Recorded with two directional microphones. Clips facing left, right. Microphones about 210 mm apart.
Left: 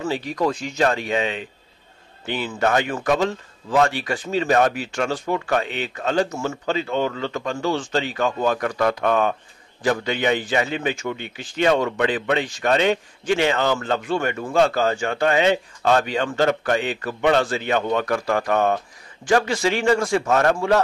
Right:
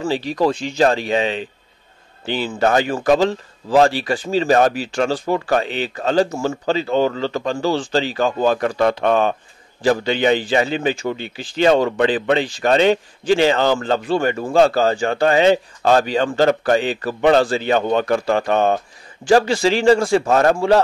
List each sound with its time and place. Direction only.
0.0 s a man's voice: 30° right (ahead or behind)